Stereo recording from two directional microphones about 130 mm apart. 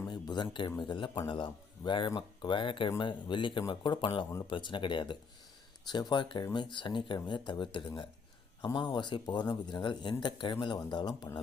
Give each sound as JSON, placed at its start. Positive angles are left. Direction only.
{"t": 0.1, "sound": "a man's voice", "side_deg": 35}